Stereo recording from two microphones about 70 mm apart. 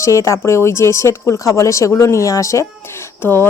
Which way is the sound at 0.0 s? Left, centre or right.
Left.